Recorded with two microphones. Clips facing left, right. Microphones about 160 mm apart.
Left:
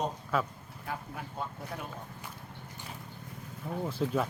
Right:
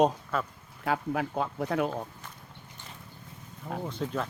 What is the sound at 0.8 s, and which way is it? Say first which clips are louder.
Speech: right 11 dB; 90° right.